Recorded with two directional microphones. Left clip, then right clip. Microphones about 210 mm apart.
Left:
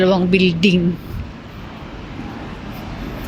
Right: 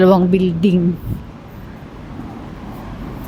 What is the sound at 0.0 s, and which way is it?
Speech, 30° right (ahead or behind).